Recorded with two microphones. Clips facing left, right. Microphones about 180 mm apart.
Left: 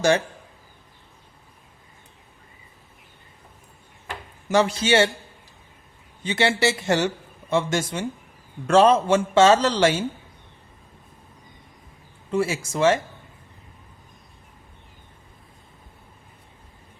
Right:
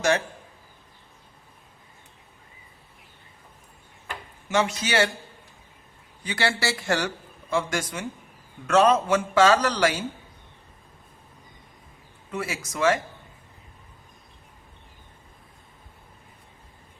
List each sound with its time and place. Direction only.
4.4 s a man's voice: 35° left (ahead or behind)
6.2 s a man's voice: 20° left (ahead or behind)
12.3 s a man's voice: 30° left (ahead or behind)